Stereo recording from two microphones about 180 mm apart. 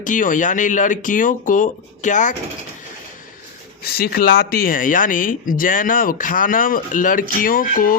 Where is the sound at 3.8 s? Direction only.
60° left (ahead or behind).